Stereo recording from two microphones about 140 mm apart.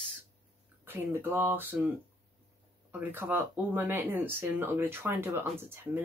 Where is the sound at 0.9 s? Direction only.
15° right (ahead or behind).